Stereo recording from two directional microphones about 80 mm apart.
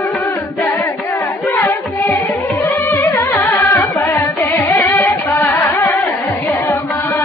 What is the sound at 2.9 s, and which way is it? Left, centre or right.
Music, left.